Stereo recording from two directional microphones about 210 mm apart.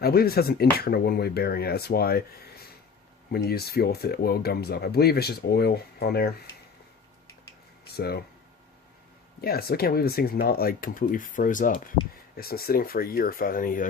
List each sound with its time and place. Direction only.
0.0 s speech: 45° left (ahead or behind)
7.9 s speech: 50° left (ahead or behind)
9.4 s speech: 45° left (ahead or behind)